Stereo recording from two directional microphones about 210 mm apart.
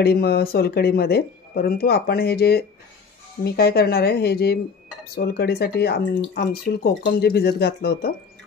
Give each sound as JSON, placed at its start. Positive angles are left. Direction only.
{"t": 0.0, "sound": "speech", "side_deg": 50}